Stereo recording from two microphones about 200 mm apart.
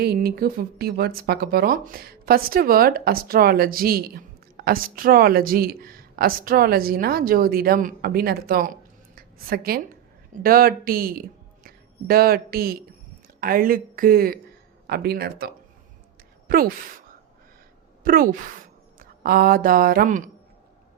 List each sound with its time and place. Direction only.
0.0 s speech: 50° right (ahead or behind)
9.1 s a sound: 50° right (ahead or behind)
10.4 s a woman's voice: 45° right (ahead or behind)
18.0 s a woman's voice: 45° right (ahead or behind)